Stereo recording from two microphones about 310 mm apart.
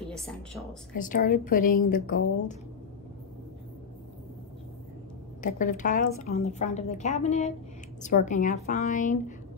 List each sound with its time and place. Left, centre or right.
0.1 s speech: centre
0.9 s a woman's voice: left
5.4 s a woman's voice: left